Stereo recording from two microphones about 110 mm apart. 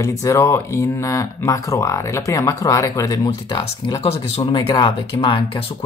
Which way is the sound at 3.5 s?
45° left (ahead or behind).